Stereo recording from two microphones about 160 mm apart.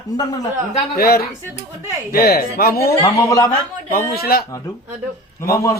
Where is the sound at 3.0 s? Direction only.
20° left (ahead or behind).